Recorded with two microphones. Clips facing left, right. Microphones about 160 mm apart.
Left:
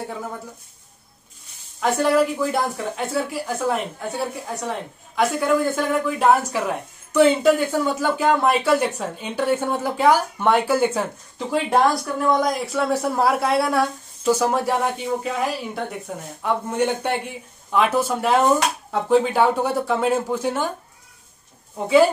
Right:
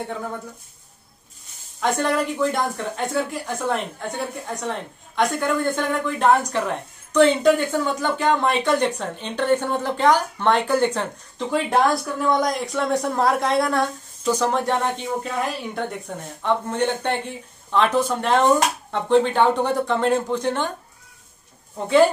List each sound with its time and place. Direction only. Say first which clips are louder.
1.8 s speech: left 3 dB; centre (ahead or behind)
21.7 s speech: left 1 dB; 5° left (ahead or behind)